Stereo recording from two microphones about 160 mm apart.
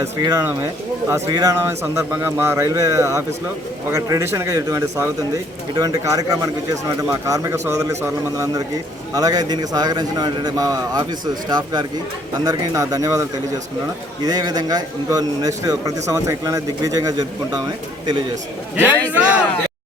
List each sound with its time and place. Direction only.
0.0 s speech: 20° right (ahead or behind)
14.3 s speech: 25° right (ahead or behind)
19.1 s speech: 10° right (ahead or behind)